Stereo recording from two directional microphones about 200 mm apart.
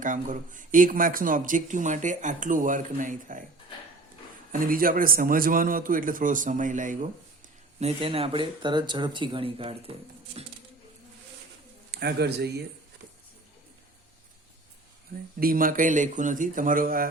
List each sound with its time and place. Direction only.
0.0 s speech: 40° right (ahead or behind)
4.5 s a man's voice: 45° right (ahead or behind); by 9.9 s 30° right (ahead or behind)
11.9 s speech: 55° right (ahead or behind)
15.4 s a man's voice: 45° right (ahead or behind)